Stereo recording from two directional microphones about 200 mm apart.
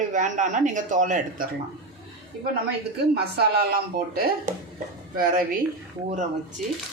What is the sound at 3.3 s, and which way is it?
Speech, 50° right (ahead or behind).